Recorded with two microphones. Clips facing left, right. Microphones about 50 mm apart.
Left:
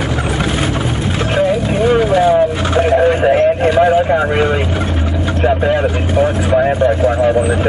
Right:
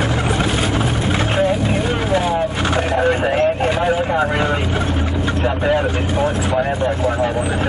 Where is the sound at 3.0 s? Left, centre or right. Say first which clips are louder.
Left 5 dB; centre.